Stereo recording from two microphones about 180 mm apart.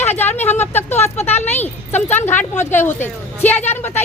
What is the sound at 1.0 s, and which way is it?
Speech, 35° left (ahead or behind).